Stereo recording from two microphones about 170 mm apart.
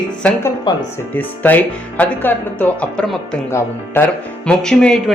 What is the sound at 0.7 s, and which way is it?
Speech, 25° left (ahead or behind).